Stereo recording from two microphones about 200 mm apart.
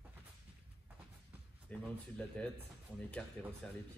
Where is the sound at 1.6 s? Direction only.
5° left (ahead or behind).